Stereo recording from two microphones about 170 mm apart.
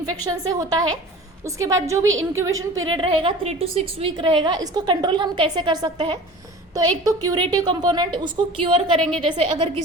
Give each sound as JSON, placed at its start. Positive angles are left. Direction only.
{"t": 0.3, "sound": "a woman's voice", "side_deg": -20}
{"t": 1.5, "sound": "a woman's voice", "side_deg": -20}
{"t": 2.8, "sound": "a woman's voice", "side_deg": -30}
{"t": 9.0, "sound": "a woman's voice", "side_deg": 5}
{"t": 9.2, "sound": "a woman's voice", "side_deg": -30}